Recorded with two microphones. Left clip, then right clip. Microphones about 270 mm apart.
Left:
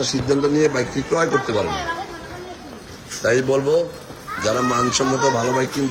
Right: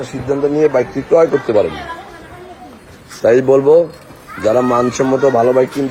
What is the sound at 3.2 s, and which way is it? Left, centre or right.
Speech, centre.